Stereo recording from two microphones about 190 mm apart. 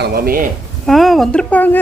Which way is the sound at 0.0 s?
55° right (ahead or behind).